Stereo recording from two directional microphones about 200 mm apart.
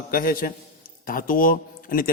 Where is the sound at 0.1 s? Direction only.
45° left (ahead or behind).